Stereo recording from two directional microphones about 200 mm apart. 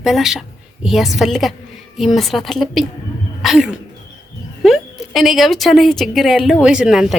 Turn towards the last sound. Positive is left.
turn(degrees=0)  # may be behind; listen again after turning